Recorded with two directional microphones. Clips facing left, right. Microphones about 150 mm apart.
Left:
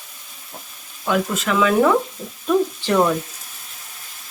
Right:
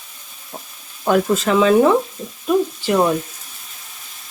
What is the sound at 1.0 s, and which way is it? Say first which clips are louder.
Speech: right 5 dB; 40° right (ahead or behind).